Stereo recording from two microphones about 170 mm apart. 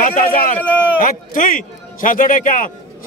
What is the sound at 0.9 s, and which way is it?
A man's voice, 55° left (ahead or behind).